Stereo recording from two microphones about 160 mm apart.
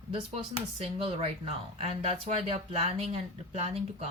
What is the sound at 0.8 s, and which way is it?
Speech, 35° right (ahead or behind).